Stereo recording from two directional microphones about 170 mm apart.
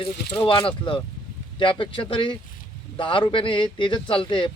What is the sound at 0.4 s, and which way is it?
Speech, 30° left (ahead or behind).